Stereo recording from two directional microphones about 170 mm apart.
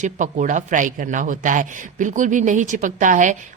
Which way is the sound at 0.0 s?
50° right (ahead or behind).